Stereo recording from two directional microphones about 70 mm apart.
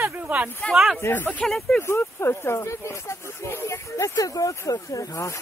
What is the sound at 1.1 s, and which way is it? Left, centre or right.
Speech, left.